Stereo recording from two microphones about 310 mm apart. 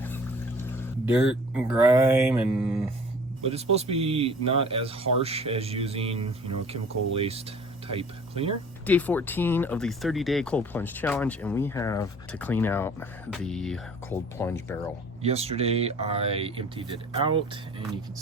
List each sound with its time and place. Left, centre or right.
1.0 s speech: centre
3.4 s speech: centre
8.9 s speech: centre
15.2 s speech: centre